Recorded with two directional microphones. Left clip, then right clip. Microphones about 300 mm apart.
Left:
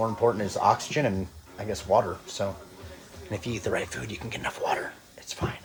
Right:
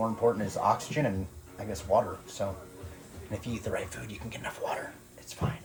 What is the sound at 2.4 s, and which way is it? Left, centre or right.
Speech, left.